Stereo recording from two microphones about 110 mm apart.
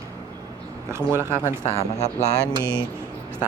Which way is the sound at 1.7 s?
70° left (ahead or behind).